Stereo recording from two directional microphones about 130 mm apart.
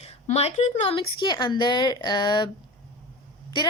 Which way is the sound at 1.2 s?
35° left (ahead or behind).